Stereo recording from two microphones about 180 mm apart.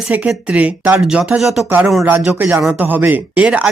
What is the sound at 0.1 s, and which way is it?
Speech, 5° right (ahead or behind).